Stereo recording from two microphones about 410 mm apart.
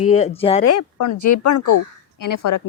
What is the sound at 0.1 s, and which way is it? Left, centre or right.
Speech, centre.